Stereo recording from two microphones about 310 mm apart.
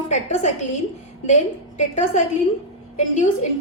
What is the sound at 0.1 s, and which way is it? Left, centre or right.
Speech, left.